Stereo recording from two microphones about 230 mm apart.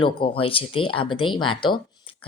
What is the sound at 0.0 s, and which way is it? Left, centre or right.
Speech, left.